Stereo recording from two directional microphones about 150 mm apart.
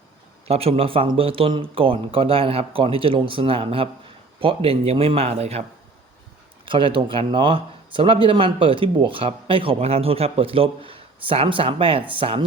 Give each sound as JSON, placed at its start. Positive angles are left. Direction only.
{"t": 0.4, "sound": "speech", "side_deg": -40}
{"t": 6.7, "sound": "speech", "side_deg": -35}